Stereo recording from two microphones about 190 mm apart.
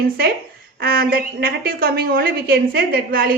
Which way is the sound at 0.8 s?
50° right (ahead or behind).